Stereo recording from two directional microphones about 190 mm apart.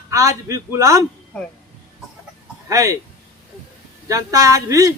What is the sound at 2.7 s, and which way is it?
Speech, 15° right (ahead or behind).